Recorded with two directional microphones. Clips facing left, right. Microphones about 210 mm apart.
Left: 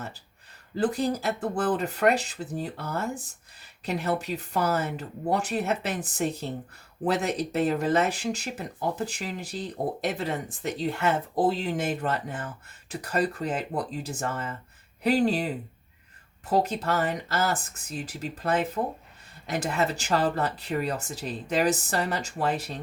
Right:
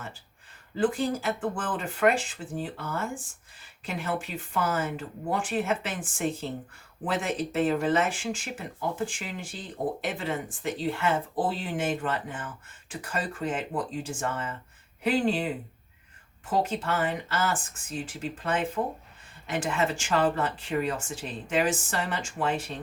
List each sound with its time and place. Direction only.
0.8 s speech: 40° left (ahead or behind)
16.5 s speech: 40° left (ahead or behind)